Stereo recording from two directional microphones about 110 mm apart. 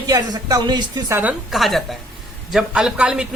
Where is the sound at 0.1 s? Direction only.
35° right (ahead or behind).